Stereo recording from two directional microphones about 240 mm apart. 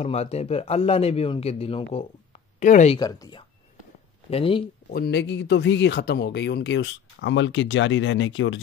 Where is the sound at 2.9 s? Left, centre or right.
Centre.